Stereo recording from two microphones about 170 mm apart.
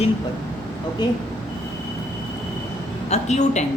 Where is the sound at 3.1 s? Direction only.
40° left (ahead or behind).